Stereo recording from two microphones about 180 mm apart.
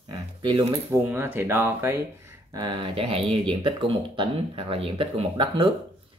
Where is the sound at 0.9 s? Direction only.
10° right (ahead or behind).